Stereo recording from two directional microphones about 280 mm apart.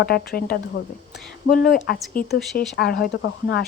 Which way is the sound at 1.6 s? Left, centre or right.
Left.